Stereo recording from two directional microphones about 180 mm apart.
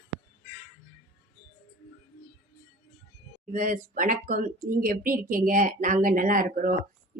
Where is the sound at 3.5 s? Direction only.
45° right (ahead or behind).